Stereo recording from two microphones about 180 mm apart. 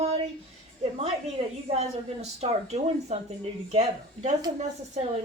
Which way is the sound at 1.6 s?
35° right (ahead or behind).